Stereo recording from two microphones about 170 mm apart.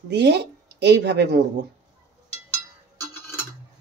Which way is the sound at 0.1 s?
85° right.